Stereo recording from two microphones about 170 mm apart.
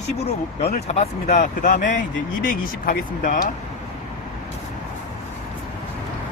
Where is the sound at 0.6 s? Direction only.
40° left (ahead or behind); by 3.5 s 55° left (ahead or behind).